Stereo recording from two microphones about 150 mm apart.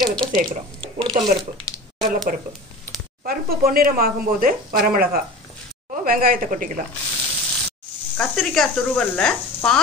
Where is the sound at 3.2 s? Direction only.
75° right (ahead or behind).